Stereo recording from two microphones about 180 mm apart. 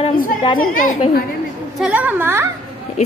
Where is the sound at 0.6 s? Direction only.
50° left (ahead or behind).